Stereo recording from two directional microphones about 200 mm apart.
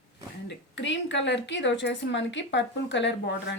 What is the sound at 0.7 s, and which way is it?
A woman's voice, 65° left (ahead or behind).